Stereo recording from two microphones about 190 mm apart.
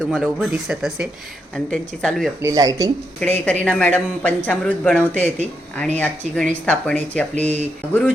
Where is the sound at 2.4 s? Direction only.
20° right (ahead or behind).